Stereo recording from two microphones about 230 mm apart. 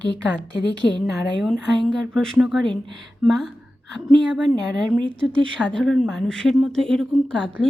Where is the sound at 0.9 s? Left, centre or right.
Centre.